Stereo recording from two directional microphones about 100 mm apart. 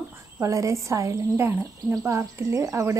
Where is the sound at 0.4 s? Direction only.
30° right (ahead or behind).